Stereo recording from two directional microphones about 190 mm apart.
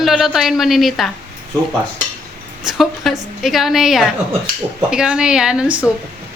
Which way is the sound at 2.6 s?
Centre (ahead or behind).